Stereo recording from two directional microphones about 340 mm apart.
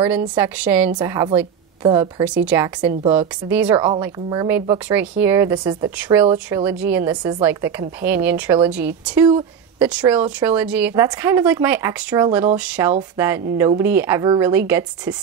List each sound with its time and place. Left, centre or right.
0.0 s a woman's voice: centre